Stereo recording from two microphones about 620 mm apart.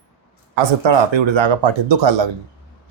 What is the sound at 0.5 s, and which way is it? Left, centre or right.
Speech, right.